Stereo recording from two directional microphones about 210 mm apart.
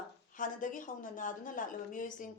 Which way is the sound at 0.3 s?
40° left (ahead or behind).